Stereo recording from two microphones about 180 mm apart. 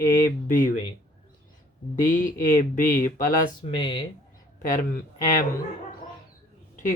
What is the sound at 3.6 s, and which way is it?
Speech, 25° left (ahead or behind).